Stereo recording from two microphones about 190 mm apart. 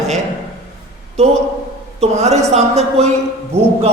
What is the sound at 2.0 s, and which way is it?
A man's voice, 35° right (ahead or behind).